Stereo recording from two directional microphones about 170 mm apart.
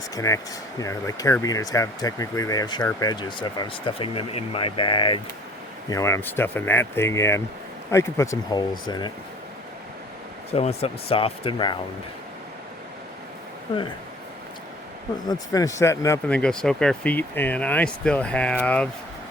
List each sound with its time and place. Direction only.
0.2 s speech: 15° left (ahead or behind)
5.9 s speech: 15° left (ahead or behind)
10.5 s speech: 35° left (ahead or behind)
15.3 s speech: 20° left (ahead or behind)
16.3 s speech: 5° left (ahead or behind)